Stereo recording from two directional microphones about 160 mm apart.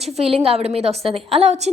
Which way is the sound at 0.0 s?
40° right (ahead or behind).